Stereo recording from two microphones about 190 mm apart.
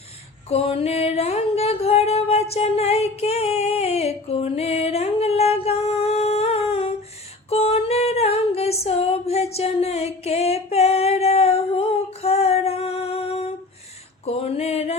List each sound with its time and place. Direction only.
0.4 s singing: 30° left (ahead or behind)
7.5 s female singing: 30° left (ahead or behind)
14.3 s a sound: 30° left (ahead or behind)